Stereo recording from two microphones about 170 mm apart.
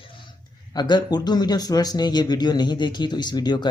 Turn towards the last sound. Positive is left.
turn(degrees=25)  # may be behind; listen again after turning